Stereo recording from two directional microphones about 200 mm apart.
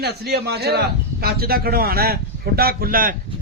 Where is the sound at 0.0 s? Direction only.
55° right (ahead or behind).